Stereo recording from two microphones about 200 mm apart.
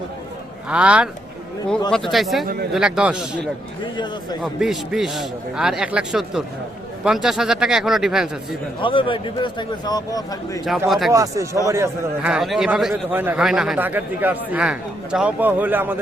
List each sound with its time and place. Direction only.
0.7 s a man's voice: 5° right (ahead or behind)
3.9 s a man's voice: 20° left (ahead or behind)
4.4 s a man's voice: centre (ahead or behind)
8.8 s a man's voice: 25° left (ahead or behind)
10.8 s a man's voice: centre (ahead or behind)
11.1 s a man's voice: 15° right (ahead or behind)